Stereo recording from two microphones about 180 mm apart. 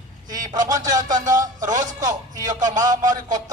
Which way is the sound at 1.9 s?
20° right (ahead or behind).